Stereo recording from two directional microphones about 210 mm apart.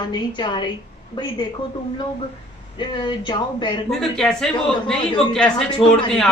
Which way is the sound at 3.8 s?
Centre (ahead or behind).